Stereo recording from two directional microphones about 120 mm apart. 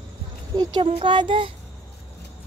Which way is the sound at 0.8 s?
45° right (ahead or behind).